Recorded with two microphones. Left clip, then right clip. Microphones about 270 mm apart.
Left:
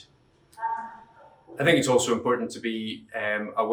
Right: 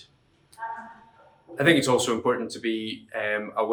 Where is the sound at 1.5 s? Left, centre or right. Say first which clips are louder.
Even; centre.